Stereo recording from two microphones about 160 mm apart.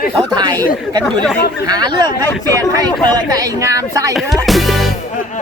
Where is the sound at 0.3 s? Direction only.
25° right (ahead or behind).